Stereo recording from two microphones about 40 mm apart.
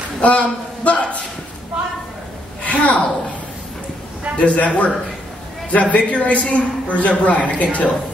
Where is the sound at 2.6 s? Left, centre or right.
Left.